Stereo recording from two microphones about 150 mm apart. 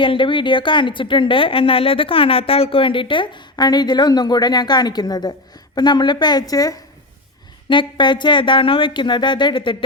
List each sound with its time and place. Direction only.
0.0 s a woman's voice: 35° left (ahead or behind)